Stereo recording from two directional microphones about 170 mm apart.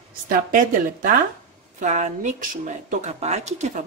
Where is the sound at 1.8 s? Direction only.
45° right (ahead or behind).